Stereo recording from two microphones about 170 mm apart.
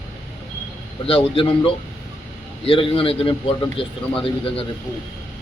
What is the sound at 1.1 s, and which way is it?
A man's voice, 30° left (ahead or behind).